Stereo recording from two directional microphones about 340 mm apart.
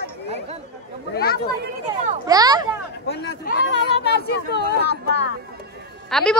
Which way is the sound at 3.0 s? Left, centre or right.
Left.